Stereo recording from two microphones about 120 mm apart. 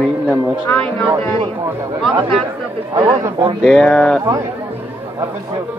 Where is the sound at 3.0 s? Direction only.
40° right (ahead or behind).